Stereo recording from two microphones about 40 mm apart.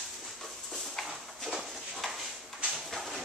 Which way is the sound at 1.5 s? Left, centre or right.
Centre.